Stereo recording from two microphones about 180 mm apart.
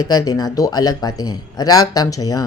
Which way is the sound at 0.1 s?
20° left (ahead or behind).